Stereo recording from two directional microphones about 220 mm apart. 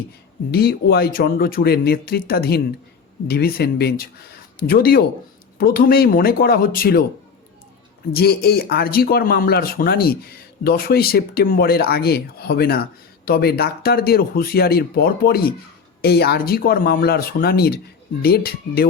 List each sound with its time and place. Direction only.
0.5 s speech: 45° left (ahead or behind)
8.1 s speech: 45° left (ahead or behind)